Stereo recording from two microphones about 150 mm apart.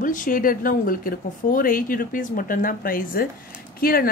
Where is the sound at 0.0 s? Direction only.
65° left (ahead or behind).